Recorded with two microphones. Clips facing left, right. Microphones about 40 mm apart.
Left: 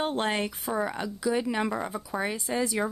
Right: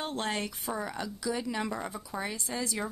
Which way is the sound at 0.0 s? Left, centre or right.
Left.